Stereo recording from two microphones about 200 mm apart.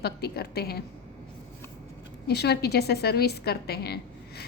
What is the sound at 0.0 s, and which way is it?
Speech, 50° left (ahead or behind).